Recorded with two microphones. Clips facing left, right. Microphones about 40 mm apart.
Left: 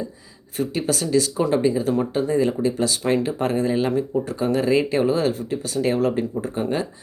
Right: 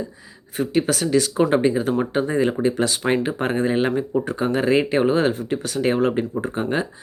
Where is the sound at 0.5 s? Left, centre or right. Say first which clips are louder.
Right 3 dB; right.